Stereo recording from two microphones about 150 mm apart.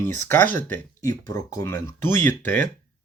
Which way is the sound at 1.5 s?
20° left (ahead or behind).